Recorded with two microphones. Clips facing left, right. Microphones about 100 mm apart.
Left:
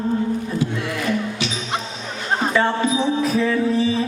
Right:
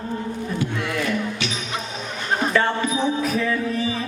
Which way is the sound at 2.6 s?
25° left (ahead or behind).